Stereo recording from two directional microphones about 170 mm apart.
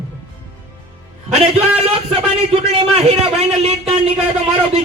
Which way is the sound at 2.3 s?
35° right (ahead or behind).